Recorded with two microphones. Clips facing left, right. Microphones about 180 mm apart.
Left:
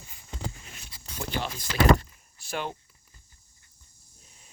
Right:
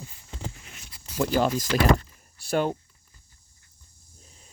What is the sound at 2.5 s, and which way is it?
Speech, 45° right (ahead or behind).